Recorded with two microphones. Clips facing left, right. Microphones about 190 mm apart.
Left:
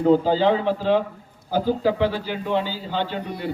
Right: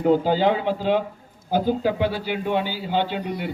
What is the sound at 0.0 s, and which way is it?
A man's voice, 15° right (ahead or behind).